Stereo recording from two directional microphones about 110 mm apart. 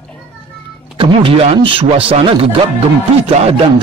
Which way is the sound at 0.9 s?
50° right (ahead or behind).